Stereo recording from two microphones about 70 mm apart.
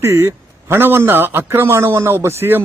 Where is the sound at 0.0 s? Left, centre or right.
Right.